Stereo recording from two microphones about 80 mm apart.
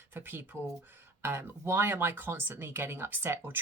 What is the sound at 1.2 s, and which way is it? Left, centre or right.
Speech, right.